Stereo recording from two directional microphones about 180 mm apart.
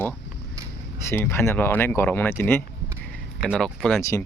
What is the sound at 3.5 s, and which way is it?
Speech, centre (ahead or behind).